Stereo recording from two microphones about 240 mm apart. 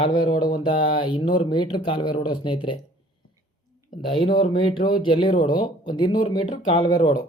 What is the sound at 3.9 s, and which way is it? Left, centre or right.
Speech, left.